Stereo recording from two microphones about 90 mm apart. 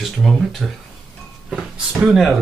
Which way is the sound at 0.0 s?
Centre (ahead or behind).